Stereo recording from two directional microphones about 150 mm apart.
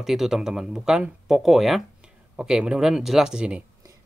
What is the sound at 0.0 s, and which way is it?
Speech, centre (ahead or behind).